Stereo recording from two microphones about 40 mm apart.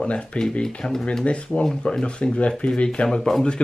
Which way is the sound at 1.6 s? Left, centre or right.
Centre.